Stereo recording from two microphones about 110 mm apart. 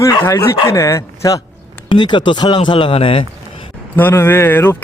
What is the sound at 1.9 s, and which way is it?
Speech, 45° left (ahead or behind).